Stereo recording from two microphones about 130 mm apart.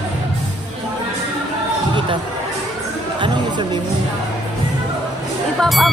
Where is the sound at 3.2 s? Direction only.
35° right (ahead or behind).